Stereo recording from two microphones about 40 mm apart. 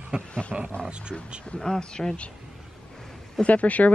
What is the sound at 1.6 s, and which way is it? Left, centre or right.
Speech, centre.